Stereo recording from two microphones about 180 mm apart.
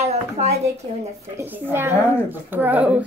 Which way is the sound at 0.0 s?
35° right (ahead or behind).